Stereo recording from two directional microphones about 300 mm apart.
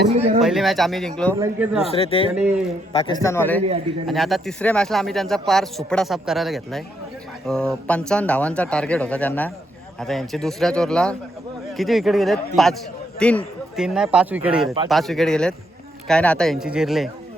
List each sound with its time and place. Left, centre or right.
0.1 s speech: right
0.4 s speech: centre
1.8 s speech: centre